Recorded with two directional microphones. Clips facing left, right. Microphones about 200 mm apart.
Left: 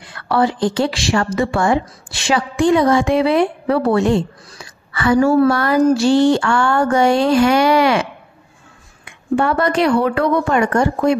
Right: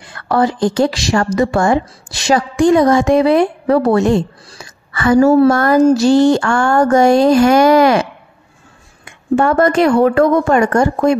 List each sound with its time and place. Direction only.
0.0 s a woman's voice: 45° right (ahead or behind)